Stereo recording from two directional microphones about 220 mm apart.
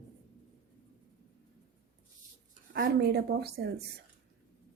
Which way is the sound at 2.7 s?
45° right (ahead or behind).